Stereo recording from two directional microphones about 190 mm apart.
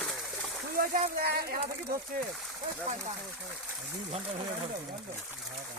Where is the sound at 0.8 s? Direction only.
50° right (ahead or behind).